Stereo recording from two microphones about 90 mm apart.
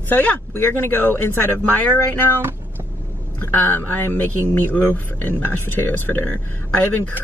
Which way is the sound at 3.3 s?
20° left (ahead or behind).